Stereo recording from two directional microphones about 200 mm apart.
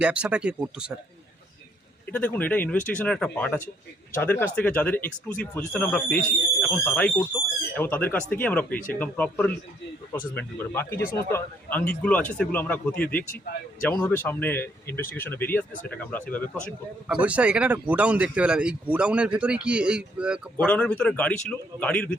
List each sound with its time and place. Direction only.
0.0 s speech: 5° right (ahead or behind)
2.0 s speech: 5° left (ahead or behind)
10.9 s speech: 50° left (ahead or behind)
11.3 s speech: 10° left (ahead or behind)
17.1 s speech: 5° right (ahead or behind)
20.7 s speech: 5° left (ahead or behind)